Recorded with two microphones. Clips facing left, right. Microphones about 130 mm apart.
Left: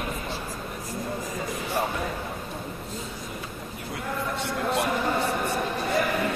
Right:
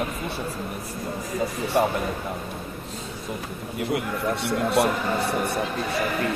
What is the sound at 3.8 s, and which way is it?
A man's voice, 70° right (ahead or behind).